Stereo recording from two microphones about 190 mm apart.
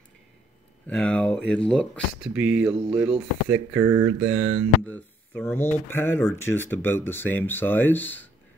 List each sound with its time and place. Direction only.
0.8 s speech: 5° left (ahead or behind)
2.3 s speech: 10° right (ahead or behind)
4.3 s speech: 30° right (ahead or behind)
4.8 s speech: 10° left (ahead or behind)